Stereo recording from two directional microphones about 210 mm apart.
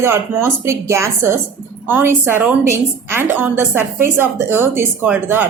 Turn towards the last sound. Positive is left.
turn(degrees=-10)  # may be behind; listen again after turning